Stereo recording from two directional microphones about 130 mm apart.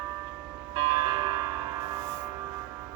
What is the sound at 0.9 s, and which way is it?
Music, 35° right (ahead or behind).